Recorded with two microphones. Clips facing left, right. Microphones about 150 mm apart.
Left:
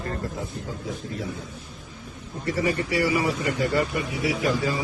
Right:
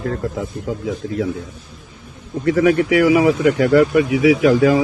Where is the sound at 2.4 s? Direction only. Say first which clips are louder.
Right 11 dB; 85° right.